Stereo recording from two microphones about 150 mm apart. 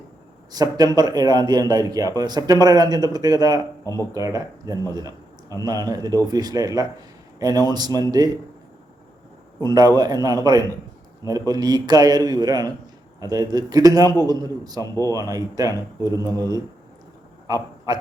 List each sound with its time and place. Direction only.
0.5 s a man's voice: 25° right (ahead or behind)
4.9 s a sound: 25° right (ahead or behind)
5.6 s a man's voice: 25° right (ahead or behind)
9.6 s a man's voice: 25° right (ahead or behind)